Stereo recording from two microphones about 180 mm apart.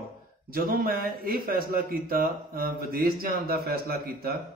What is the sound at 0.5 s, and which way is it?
Speech, 55° right (ahead or behind).